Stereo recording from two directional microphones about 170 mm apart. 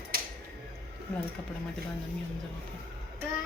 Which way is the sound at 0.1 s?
65° right (ahead or behind).